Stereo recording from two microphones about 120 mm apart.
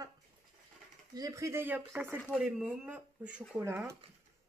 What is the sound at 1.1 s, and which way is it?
Speech, 30° right (ahead or behind).